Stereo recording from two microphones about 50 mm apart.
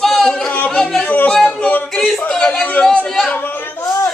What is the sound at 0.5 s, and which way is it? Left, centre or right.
Yodeling, left.